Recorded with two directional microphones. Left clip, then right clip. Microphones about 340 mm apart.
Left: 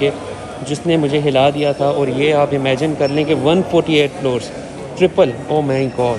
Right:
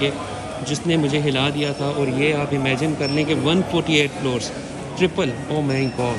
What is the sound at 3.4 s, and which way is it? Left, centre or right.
Speech, centre.